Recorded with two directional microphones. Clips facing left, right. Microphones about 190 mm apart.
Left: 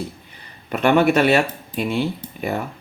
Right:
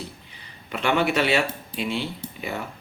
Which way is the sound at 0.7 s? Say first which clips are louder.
Left 7 dB; 50° left (ahead or behind).